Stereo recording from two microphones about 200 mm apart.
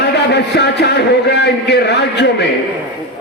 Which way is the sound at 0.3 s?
60° left (ahead or behind).